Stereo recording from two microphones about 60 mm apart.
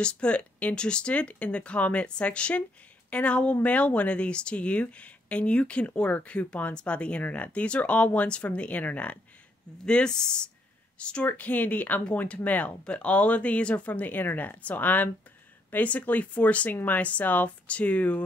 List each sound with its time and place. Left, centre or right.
0.0 s speech: centre
9.8 s speech: centre